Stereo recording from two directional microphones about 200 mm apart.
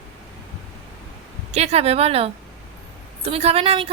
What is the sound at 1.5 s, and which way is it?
A woman's voice, 30° right (ahead or behind).